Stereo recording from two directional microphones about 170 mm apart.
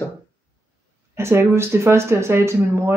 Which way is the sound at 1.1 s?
15° right (ahead or behind).